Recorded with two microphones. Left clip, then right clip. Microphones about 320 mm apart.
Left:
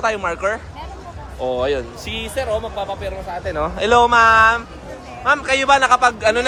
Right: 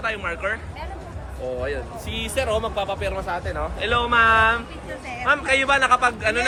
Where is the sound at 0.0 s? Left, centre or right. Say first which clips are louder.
Left 6 dB; centre.